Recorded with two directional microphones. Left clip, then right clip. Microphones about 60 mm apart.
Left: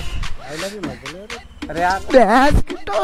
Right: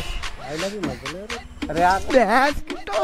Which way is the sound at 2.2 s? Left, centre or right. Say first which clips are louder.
Left 6 dB; left.